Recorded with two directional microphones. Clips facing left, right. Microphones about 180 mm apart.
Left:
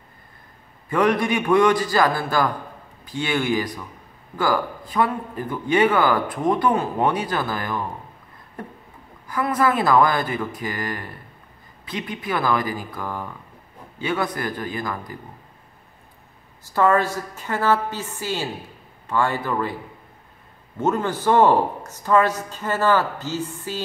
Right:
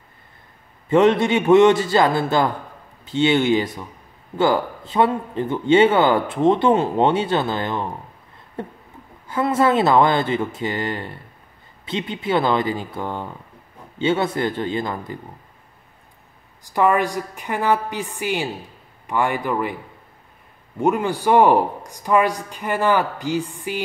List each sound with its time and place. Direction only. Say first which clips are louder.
0.8 s a man's voice: right 5 dB; 25° right (ahead or behind)
16.6 s speech: right 1 dB; 15° right (ahead or behind)
20.8 s speech: right 2 dB; 15° right (ahead or behind)